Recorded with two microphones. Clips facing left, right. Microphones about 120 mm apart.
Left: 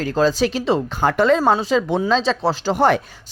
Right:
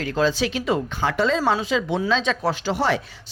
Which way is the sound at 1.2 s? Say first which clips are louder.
Left 5 dB; 55° left (ahead or behind).